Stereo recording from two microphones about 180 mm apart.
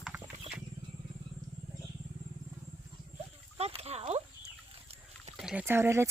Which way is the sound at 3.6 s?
35° right (ahead or behind).